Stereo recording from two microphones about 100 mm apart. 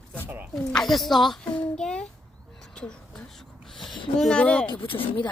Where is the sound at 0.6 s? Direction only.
5° left (ahead or behind).